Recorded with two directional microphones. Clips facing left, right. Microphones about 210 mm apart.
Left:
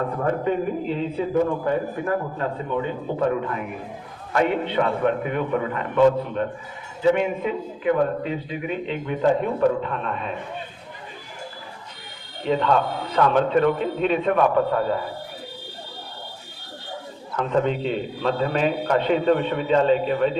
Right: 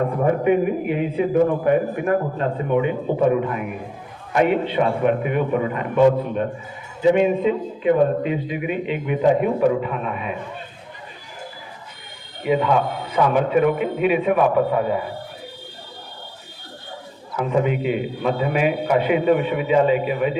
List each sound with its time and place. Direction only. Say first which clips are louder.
0.3 s a man's voice: right 5 dB; 15° right (ahead or behind)
12.4 s a man's voice: right 2 dB; 10° right (ahead or behind)
17.3 s a man's voice: right 1 dB; 10° right (ahead or behind)